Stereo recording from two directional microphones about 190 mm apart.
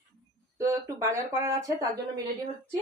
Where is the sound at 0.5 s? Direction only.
15° right (ahead or behind).